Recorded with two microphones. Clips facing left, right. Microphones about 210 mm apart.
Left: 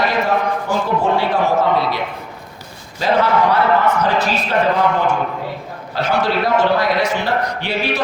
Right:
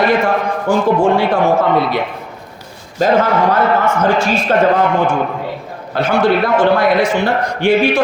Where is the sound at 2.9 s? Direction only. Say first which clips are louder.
Right 3 dB; 45° right (ahead or behind).